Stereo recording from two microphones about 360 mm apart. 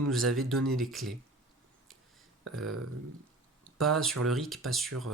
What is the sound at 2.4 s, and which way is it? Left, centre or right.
Speech, right.